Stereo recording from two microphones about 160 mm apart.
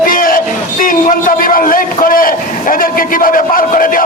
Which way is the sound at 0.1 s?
60° left (ahead or behind).